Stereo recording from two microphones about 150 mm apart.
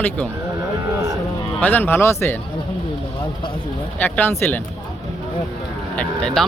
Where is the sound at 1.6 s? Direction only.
10° left (ahead or behind).